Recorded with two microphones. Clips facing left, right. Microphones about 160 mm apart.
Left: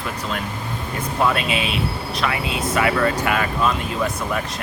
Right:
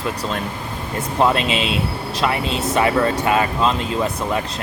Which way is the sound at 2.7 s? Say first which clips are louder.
Right 2 dB; 25° right (ahead or behind).